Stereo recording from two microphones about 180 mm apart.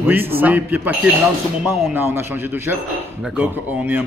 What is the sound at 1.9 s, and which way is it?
Speech, 10° right (ahead or behind).